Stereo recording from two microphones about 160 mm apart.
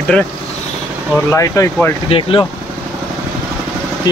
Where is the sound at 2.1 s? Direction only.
40° left (ahead or behind).